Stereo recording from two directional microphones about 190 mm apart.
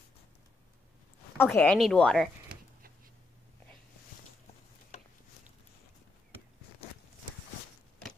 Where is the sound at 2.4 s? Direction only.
50° right (ahead or behind).